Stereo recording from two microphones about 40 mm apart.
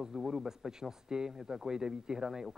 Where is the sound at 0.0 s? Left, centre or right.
Centre.